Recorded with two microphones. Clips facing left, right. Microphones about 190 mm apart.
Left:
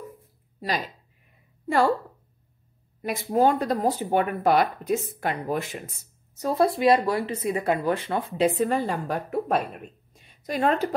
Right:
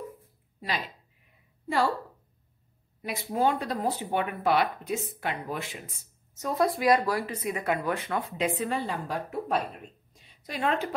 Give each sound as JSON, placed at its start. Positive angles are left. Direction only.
{"t": 0.6, "sound": "speech", "side_deg": 45}
{"t": 3.0, "sound": "speech", "side_deg": 45}
{"t": 6.3, "sound": "speech", "side_deg": 30}
{"t": 10.1, "sound": "a sound", "side_deg": 45}